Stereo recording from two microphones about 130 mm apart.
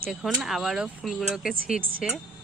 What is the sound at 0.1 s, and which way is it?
Speech, centre (ahead or behind).